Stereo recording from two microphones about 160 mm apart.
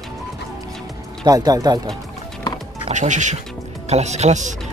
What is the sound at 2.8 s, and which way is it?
Speech, 50° right (ahead or behind).